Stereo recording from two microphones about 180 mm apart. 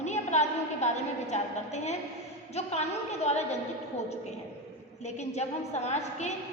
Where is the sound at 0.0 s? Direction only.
40° left (ahead or behind).